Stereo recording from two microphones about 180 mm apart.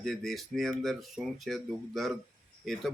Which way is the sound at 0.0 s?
Centre (ahead or behind).